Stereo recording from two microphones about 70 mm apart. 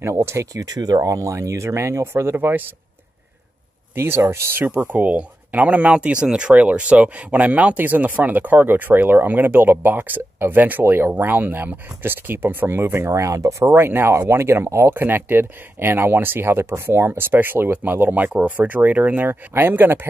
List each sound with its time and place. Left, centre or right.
0.0 s speech: right
0.7 s speech: right
1.1 s speech: right
3.9 s speech: right
4.6 s speech: right